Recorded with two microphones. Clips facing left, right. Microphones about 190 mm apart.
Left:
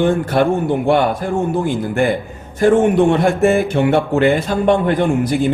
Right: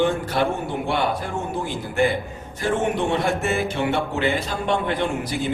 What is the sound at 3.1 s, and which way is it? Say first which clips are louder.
Speech: left 9 dB; 50° left (ahead or behind).